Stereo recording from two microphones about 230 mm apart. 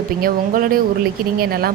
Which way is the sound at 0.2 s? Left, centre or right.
Right.